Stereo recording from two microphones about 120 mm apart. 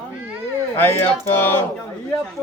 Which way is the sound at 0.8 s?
20° left (ahead or behind).